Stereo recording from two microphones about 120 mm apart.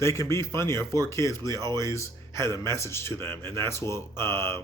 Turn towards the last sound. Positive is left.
turn(degrees=20)  # may be behind; listen again after turning